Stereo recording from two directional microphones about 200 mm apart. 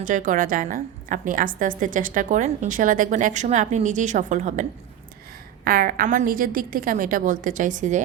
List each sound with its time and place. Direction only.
0.0 s a woman's voice: 40° right (ahead or behind)
5.6 s a woman's voice: 45° right (ahead or behind)